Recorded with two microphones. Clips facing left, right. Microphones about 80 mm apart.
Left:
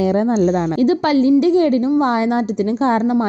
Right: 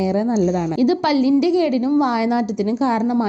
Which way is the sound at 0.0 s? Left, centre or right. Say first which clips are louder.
Left 3 dB; left.